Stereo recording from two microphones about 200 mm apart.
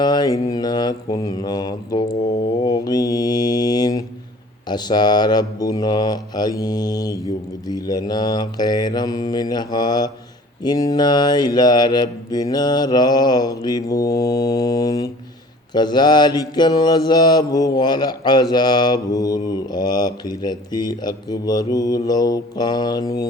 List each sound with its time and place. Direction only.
0.0 s mantra: 20° left (ahead or behind)